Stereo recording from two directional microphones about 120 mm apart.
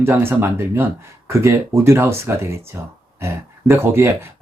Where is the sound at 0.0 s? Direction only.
20° right (ahead or behind).